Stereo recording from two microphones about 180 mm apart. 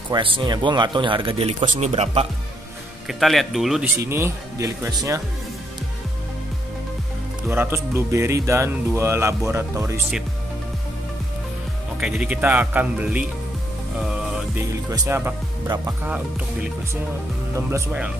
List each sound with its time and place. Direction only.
0.1 s speech: 30° right (ahead or behind)
3.1 s speech: centre (ahead or behind)
4.0 s speech: 15° right (ahead or behind)
7.4 s speech: 10° right (ahead or behind)
12.0 s speech: 5° right (ahead or behind)
13.9 s music: 5° right (ahead or behind)
14.6 s speech: 15° right (ahead or behind)
17.6 s speech: 10° right (ahead or behind)